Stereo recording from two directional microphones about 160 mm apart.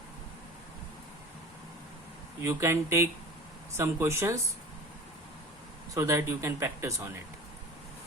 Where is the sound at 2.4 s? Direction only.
15° right (ahead or behind).